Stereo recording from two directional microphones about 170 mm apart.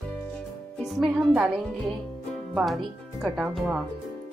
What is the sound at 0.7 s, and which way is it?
Speech, centre (ahead or behind).